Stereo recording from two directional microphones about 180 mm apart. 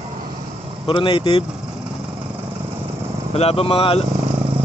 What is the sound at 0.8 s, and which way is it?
Speech, 30° left (ahead or behind).